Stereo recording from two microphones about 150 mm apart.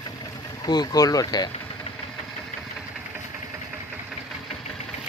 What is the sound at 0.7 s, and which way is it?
Speech, 25° left (ahead or behind).